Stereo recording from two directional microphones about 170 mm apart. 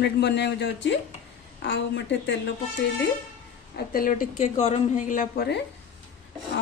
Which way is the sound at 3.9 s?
55° left (ahead or behind).